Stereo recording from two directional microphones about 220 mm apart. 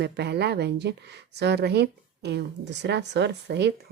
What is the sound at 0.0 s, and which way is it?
Speech, 50° right (ahead or behind).